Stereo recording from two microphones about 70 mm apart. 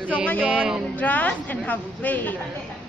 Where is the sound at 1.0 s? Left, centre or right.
Left.